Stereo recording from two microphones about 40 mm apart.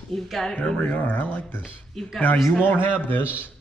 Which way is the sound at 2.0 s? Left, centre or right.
Centre.